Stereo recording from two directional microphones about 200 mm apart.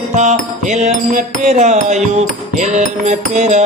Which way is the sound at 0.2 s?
35° right (ahead or behind).